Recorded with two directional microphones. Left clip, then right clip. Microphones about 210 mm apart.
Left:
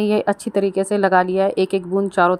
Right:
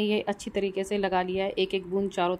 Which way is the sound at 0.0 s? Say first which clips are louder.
Left 9 dB; 20° left (ahead or behind).